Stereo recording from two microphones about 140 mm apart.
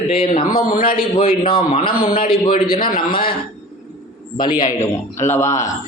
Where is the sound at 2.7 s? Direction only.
85° left.